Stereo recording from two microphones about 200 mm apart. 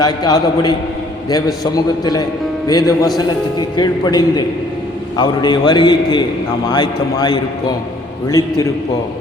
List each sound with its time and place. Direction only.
0.0 s a man's voice: 20° left (ahead or behind)